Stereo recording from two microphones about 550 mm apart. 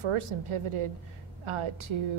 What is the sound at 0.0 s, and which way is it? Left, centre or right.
A woman's voice, right.